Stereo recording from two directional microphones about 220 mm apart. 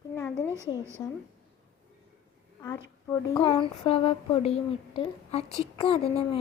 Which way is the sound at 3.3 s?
25° left (ahead or behind).